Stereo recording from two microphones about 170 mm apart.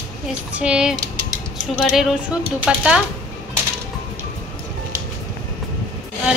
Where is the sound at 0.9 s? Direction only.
25° right (ahead or behind).